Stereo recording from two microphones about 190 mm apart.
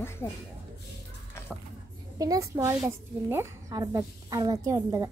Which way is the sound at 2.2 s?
20° right (ahead or behind).